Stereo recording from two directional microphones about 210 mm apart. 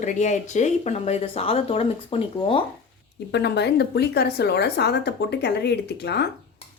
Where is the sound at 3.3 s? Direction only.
55° left (ahead or behind).